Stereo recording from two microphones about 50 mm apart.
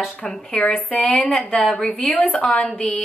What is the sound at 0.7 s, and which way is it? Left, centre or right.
Speech, left.